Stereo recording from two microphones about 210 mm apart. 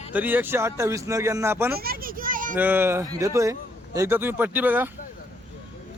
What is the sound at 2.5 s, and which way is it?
Speech, 10° right (ahead or behind).